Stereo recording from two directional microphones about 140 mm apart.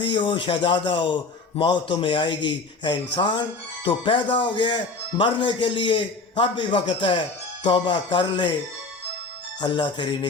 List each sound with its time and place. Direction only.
0.0 s speech: 35° left (ahead or behind)
9.6 s speech: 30° left (ahead or behind)